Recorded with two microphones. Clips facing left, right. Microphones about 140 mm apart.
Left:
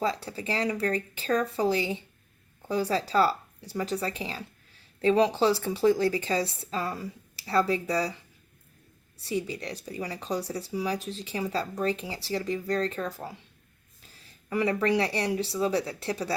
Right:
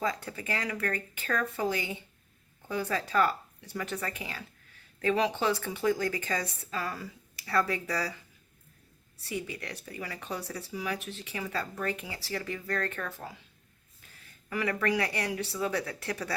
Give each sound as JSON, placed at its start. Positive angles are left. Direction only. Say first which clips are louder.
{"t": 0.0, "sound": "a woman's voice", "louder": "left 3 dB", "side_deg": 30}
{"t": 9.2, "sound": "a woman's voice", "louder": "left 5 dB", "side_deg": 30}
{"t": 14.5, "sound": "a woman's voice", "louder": "left 4 dB", "side_deg": 25}